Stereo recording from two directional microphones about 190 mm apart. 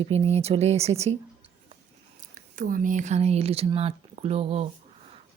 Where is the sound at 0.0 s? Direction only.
35° right (ahead or behind).